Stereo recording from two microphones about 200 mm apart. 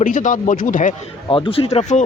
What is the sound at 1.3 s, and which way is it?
Speech, 25° left (ahead or behind).